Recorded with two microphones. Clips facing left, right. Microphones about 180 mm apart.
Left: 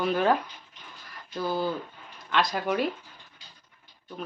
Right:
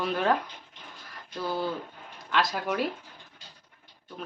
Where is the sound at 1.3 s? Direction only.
Centre (ahead or behind).